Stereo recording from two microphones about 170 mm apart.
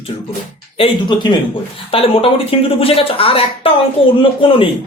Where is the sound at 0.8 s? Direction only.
25° left (ahead or behind).